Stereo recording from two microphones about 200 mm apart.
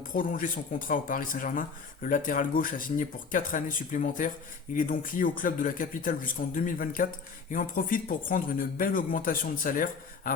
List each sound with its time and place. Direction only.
0.1 s speech: 45° left (ahead or behind)